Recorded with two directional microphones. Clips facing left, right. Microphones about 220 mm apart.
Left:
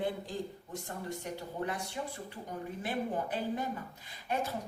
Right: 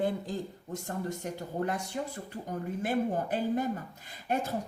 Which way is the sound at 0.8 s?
45° right (ahead or behind).